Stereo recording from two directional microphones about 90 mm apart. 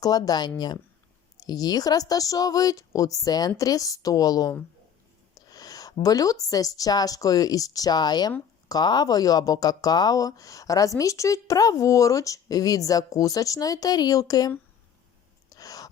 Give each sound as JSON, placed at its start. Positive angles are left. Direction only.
{"t": 0.0, "sound": "a woman's voice", "side_deg": 45}
{"t": 15.4, "sound": "gasp", "side_deg": 45}